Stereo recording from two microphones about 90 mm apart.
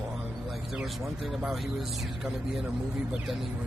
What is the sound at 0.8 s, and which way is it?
Speech, 5° right (ahead or behind).